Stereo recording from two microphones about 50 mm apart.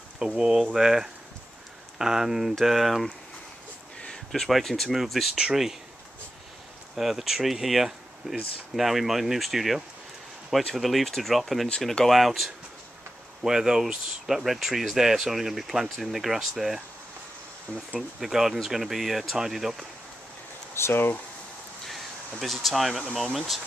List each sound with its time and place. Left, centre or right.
0.4 s speech: centre
4.5 s speech: centre
5.3 s speech: centre
7.0 s speech: centre
18.2 s speech: centre
20.7 s speech: left
21.8 s speech: centre